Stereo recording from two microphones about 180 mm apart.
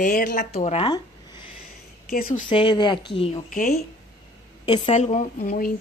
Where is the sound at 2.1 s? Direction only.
55° left (ahead or behind).